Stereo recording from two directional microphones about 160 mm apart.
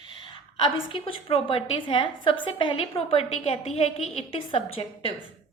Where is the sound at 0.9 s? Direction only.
35° left (ahead or behind).